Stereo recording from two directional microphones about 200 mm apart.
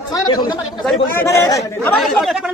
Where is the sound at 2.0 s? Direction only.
Centre (ahead or behind).